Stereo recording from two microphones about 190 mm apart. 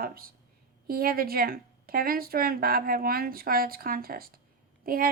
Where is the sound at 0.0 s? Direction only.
50° right (ahead or behind).